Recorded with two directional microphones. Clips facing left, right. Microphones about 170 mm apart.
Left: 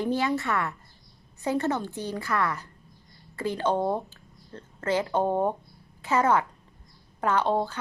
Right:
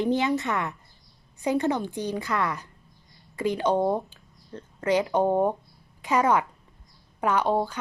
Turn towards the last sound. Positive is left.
turn(degrees=-10)  # may be behind; listen again after turning